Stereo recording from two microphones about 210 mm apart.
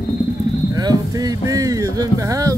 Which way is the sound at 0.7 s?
20° right (ahead or behind).